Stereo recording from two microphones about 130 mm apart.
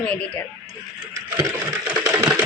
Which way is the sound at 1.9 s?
10° right (ahead or behind).